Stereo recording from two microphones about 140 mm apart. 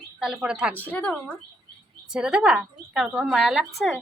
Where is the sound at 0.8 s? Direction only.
10° left (ahead or behind).